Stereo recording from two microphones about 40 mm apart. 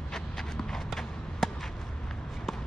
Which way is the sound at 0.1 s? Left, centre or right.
Centre.